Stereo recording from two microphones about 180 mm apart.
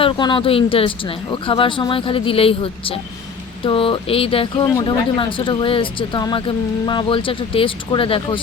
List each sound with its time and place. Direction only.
0.0 s speech: 25° left (ahead or behind)